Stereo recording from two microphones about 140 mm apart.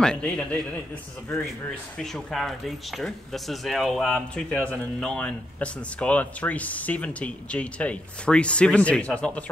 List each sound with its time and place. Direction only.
0.0 s a man's voice: 5° left (ahead or behind)
2.0 s speech: centre (ahead or behind)